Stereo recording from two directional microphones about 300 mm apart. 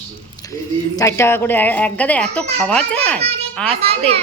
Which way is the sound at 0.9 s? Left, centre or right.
Centre.